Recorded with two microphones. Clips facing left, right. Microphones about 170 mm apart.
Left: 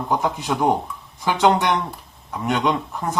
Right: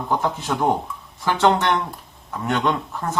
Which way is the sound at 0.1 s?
Centre (ahead or behind).